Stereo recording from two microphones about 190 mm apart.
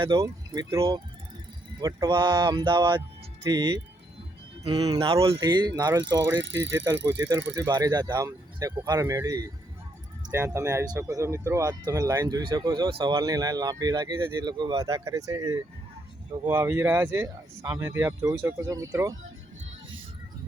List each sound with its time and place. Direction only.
0.0 s speech: 25° right (ahead or behind)
7.1 s speech: 20° right (ahead or behind)